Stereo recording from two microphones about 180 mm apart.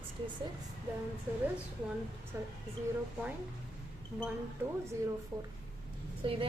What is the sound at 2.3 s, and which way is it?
Speech, 15° right (ahead or behind).